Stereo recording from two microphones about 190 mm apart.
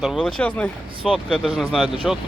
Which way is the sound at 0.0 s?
Centre (ahead or behind).